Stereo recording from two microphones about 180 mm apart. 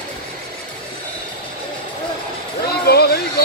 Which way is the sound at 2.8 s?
60° left (ahead or behind).